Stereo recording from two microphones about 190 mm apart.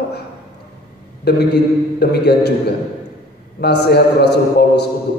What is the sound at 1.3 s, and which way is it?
A man's voice, 60° left (ahead or behind).